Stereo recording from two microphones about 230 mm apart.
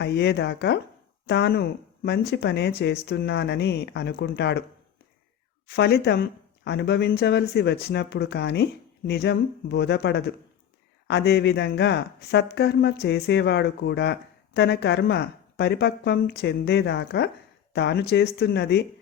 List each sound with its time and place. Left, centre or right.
0.0 s speech: left
5.6 s speech: left